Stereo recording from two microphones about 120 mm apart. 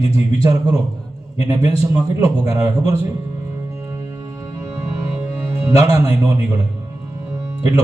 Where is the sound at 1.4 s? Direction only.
30° right (ahead or behind).